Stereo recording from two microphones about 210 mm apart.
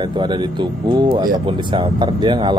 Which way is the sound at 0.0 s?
20° right (ahead or behind).